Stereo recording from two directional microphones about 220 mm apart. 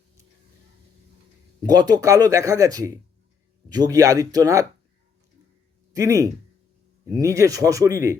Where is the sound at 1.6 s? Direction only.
15° right (ahead or behind).